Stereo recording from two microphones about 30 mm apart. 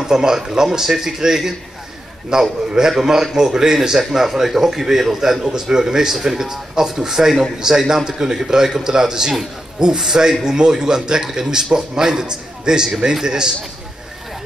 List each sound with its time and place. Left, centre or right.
0.0 s a man's voice: right